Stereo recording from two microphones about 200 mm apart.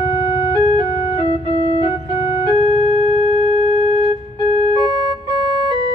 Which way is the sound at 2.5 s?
25° right (ahead or behind).